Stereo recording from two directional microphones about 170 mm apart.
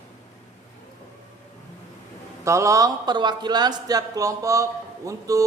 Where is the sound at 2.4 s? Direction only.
15° right (ahead or behind).